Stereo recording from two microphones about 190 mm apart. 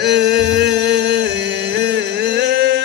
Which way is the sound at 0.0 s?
65° right (ahead or behind).